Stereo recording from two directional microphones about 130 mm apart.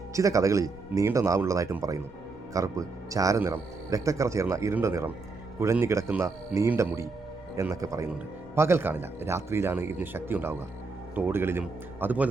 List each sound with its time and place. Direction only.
0.1 s speech: 25° right (ahead or behind)